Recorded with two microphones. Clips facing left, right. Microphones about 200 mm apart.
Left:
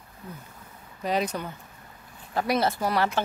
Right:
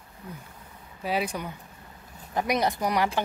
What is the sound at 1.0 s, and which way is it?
Speech, 10° right (ahead or behind).